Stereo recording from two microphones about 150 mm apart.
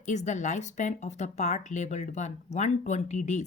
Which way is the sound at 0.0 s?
50° left (ahead or behind).